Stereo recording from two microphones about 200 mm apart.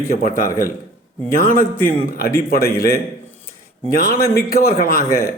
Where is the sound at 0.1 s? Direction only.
45° left (ahead or behind).